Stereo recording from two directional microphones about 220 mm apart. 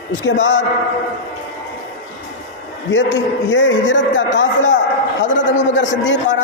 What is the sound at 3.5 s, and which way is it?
A man's voice, 55° left (ahead or behind).